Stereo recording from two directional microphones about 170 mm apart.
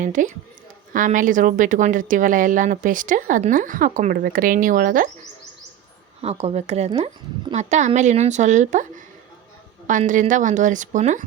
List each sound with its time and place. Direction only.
0.0 s speech: 50° right (ahead or behind)
6.2 s a woman's voice: 35° right (ahead or behind)
10.1 s speech: 50° right (ahead or behind)